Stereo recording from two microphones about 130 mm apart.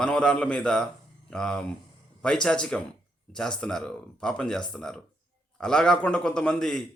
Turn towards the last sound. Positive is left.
turn(degrees=5)  # may be behind; listen again after turning